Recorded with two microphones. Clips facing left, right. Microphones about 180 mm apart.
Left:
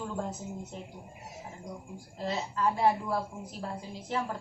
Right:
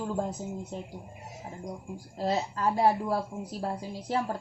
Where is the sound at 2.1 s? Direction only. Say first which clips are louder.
Right 4 dB; 40° right (ahead or behind).